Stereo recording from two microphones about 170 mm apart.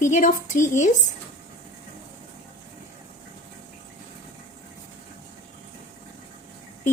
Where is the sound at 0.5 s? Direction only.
15° left (ahead or behind).